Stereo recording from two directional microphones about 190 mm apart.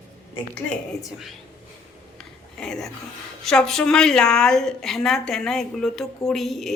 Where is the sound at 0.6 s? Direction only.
Centre (ahead or behind).